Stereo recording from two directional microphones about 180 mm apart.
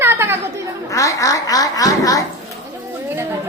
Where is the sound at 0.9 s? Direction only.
20° left (ahead or behind).